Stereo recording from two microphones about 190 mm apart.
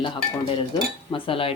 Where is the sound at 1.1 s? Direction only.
30° left (ahead or behind).